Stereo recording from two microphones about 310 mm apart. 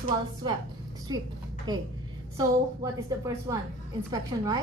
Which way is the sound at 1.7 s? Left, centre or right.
Centre.